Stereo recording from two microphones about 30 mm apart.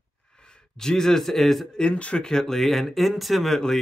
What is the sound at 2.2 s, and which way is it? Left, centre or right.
Speech, centre.